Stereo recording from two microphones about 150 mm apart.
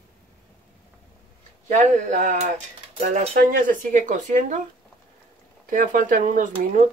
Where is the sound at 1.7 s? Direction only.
55° right (ahead or behind).